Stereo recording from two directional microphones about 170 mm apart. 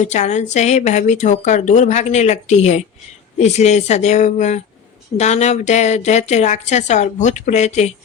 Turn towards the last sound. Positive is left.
turn(degrees=40)  # may be behind; listen again after turning